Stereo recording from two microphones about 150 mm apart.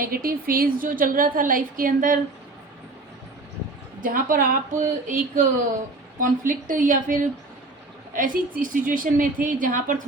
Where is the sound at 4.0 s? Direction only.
65° right (ahead or behind).